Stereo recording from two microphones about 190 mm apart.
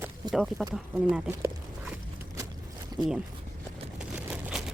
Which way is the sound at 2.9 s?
20° right (ahead or behind).